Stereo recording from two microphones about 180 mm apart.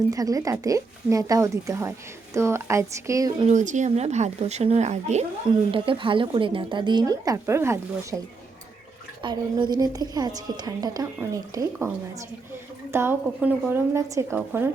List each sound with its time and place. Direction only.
0.1 s a woman's voice: 20° right (ahead or behind)
3.5 s a woman's voice: 45° right (ahead or behind); by 7.8 s 15° right (ahead or behind)
8.1 s speech: centre (ahead or behind)
9.2 s a woman's voice: 25° right (ahead or behind)
12.9 s a woman's voice: 10° right (ahead or behind)